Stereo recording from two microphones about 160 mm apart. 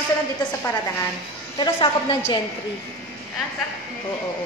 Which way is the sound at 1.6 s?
30° left (ahead or behind).